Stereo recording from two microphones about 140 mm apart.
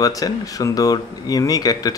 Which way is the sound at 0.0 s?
25° left (ahead or behind).